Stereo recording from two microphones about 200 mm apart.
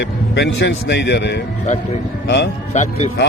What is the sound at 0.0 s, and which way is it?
Speech, 60° left (ahead or behind).